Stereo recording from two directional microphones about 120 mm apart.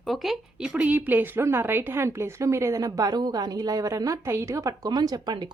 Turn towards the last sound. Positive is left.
turn(degrees=-35)  # may be behind; listen again after turning